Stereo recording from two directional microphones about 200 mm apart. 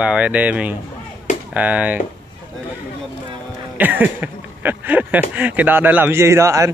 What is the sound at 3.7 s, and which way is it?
Speech, 10° right (ahead or behind).